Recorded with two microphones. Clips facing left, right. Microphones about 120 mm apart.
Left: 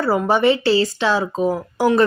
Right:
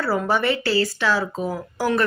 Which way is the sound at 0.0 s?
20° left (ahead or behind).